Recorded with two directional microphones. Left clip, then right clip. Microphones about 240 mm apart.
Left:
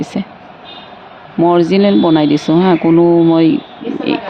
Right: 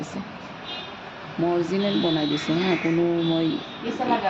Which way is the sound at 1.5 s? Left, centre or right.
Left.